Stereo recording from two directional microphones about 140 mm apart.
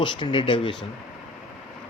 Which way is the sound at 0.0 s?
35° left (ahead or behind).